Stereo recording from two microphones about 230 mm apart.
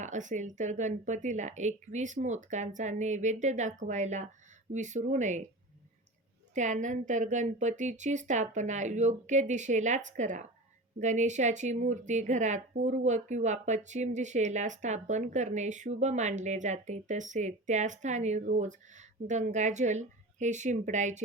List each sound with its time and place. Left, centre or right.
0.0 s speech: right
6.5 s speech: right